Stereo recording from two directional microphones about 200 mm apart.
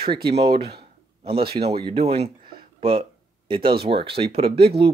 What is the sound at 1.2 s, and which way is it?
Speech, 25° right (ahead or behind).